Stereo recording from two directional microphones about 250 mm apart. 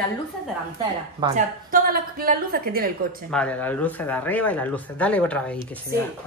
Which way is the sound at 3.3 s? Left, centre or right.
Centre.